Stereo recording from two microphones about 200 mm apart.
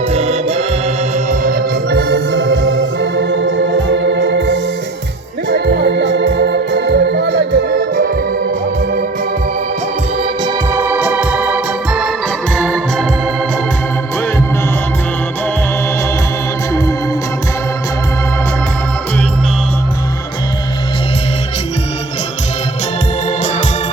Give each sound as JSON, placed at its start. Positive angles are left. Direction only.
{"t": 0.1, "sound": "music", "side_deg": -30}
{"t": 1.3, "sound": "organ", "side_deg": -45}
{"t": 10.4, "sound": "organ", "side_deg": -10}
{"t": 12.5, "sound": "organ", "side_deg": 5}